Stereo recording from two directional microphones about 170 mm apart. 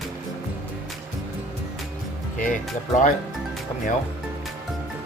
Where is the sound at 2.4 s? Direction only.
50° left (ahead or behind).